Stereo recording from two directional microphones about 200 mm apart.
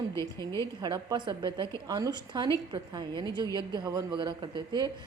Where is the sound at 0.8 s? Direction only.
20° right (ahead or behind).